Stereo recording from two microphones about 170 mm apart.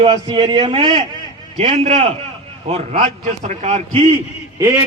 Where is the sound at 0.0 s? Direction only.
30° right (ahead or behind).